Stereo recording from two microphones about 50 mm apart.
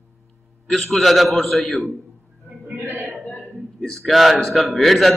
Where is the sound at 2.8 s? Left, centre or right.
Right.